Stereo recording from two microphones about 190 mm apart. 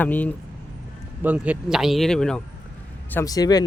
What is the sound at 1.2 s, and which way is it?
Speech, 10° right (ahead or behind).